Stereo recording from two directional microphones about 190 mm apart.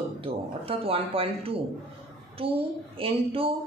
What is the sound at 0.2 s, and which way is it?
Speech, 30° right (ahead or behind).